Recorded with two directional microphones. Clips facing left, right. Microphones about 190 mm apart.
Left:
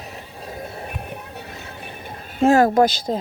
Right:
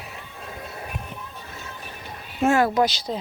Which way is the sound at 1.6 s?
60° left (ahead or behind).